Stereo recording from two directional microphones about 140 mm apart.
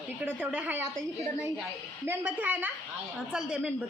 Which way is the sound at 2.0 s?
15° right (ahead or behind).